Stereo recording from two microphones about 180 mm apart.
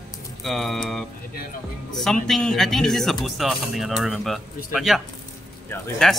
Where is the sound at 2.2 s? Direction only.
Centre (ahead or behind).